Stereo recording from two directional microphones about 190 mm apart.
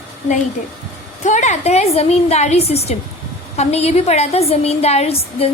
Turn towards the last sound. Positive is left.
turn(degrees=35)  # may be behind; listen again after turning